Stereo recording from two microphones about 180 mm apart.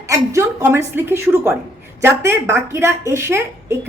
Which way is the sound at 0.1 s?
15° right (ahead or behind).